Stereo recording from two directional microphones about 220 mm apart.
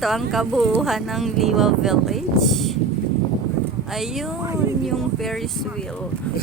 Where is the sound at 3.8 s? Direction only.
Centre (ahead or behind).